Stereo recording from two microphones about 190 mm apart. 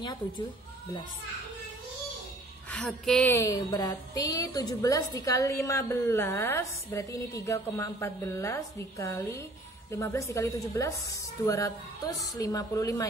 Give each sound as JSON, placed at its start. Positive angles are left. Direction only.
{"t": 2.7, "sound": "speech", "side_deg": 0}
{"t": 3.3, "sound": "a woman's voice", "side_deg": 20}